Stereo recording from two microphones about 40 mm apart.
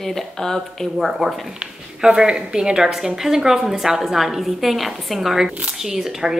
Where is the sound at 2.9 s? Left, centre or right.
Centre.